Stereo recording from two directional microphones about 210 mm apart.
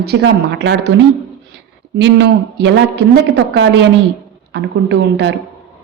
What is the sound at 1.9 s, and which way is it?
Speech, 55° right (ahead or behind).